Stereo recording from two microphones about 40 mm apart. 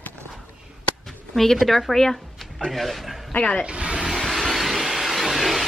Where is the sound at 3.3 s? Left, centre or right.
Left.